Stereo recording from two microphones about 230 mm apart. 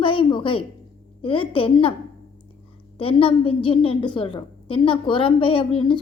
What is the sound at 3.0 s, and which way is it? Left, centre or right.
A woman's voice, left.